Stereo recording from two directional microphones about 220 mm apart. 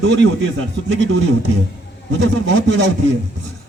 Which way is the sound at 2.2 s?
55° right (ahead or behind).